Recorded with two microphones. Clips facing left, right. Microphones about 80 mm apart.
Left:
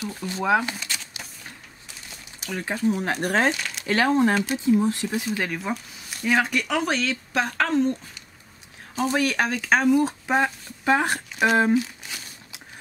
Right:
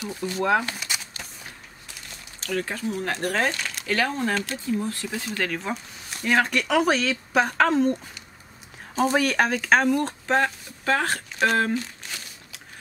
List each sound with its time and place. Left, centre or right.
0.2 s speech: centre
1.2 s a sound: centre
2.4 s speech: centre
3.5 s a sound: centre
3.8 s speech: left
5.6 s speech: centre